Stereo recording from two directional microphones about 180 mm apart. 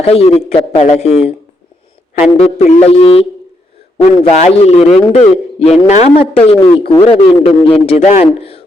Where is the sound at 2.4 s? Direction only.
40° left (ahead or behind).